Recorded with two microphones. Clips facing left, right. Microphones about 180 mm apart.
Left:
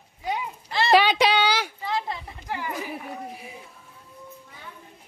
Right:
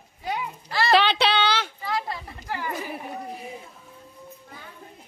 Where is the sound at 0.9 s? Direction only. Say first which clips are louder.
Left 2 dB; 10° left (ahead or behind).